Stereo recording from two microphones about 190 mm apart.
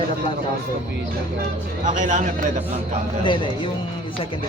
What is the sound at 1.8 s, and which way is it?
Speech, 40° right (ahead or behind).